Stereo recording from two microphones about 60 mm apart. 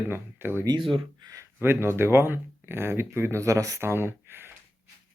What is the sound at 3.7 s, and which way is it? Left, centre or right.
Speech, right.